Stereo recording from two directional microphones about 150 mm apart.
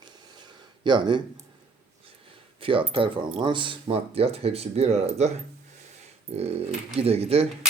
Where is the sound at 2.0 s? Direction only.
35° right (ahead or behind).